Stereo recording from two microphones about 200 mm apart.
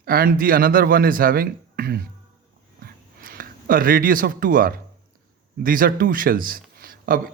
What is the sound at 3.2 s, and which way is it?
Speech, 45° right (ahead or behind).